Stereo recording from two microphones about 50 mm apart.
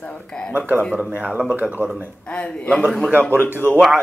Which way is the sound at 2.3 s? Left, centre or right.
Left.